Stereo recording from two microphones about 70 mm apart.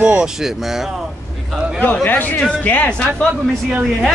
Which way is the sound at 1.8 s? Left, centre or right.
Left.